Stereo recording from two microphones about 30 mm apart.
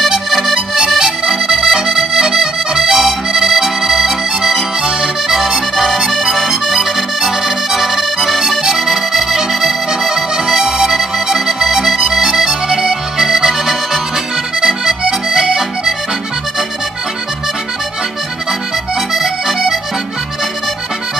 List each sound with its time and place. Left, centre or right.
0.0 s accordion: centre
1.3 s accordion: centre
8.7 s accordion: centre
10.3 s accordion: centre
11.3 s music: centre
12.1 s accordion: centre
19.1 s accordion: centre